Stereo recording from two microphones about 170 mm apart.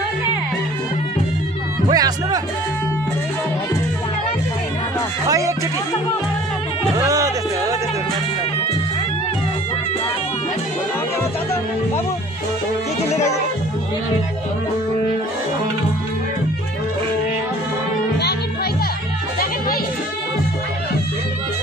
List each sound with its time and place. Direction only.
1.9 s music: 20° right (ahead or behind)
7.0 s music: 20° right (ahead or behind)